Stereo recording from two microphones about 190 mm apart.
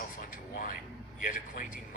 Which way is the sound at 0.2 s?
45° left (ahead or behind).